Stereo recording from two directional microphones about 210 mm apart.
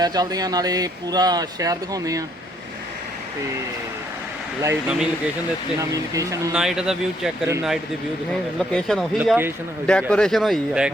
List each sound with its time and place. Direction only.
0.0 s speech: 20° right (ahead or behind)
4.6 s speech: 15° right (ahead or behind)
6.6 s speech: 5° right (ahead or behind)
8.5 s speech: centre (ahead or behind)